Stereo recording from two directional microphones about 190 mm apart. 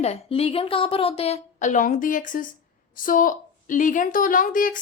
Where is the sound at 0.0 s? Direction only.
30° left (ahead or behind).